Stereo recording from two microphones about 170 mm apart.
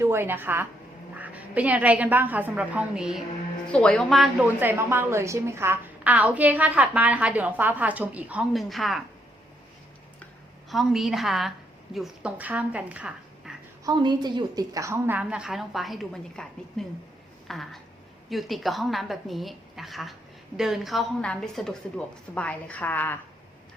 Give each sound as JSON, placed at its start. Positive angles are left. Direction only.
{"t": 0.0, "sound": "a woman's voice", "side_deg": -15}
{"t": 4.4, "sound": "a woman's voice", "side_deg": -15}
{"t": 10.7, "sound": "a woman's voice", "side_deg": 0}
{"t": 13.8, "sound": "a woman's voice", "side_deg": -25}